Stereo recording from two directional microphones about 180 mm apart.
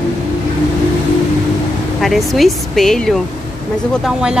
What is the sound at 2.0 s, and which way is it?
Speech, centre (ahead or behind).